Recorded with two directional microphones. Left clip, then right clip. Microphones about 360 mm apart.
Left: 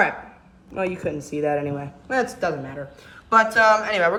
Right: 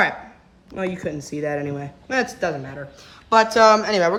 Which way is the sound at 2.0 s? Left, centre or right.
Right.